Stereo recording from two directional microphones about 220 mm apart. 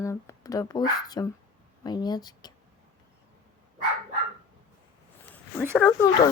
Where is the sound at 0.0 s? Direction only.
15° left (ahead or behind).